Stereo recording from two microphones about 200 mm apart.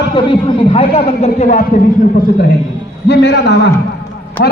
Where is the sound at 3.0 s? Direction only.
55° left (ahead or behind).